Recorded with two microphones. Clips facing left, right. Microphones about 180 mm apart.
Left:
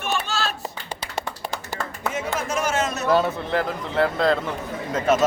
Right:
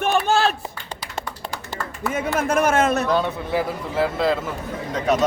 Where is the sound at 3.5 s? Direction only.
10° right (ahead or behind).